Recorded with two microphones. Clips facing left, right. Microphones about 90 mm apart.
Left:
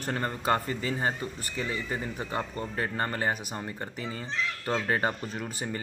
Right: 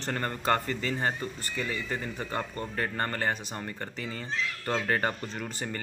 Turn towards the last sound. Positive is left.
turn(degrees=10)  # may be behind; listen again after turning